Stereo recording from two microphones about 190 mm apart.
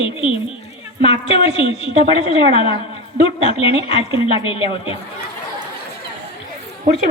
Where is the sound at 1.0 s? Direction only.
30° left (ahead or behind).